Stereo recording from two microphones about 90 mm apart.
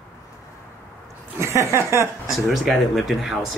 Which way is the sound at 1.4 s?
35° right (ahead or behind).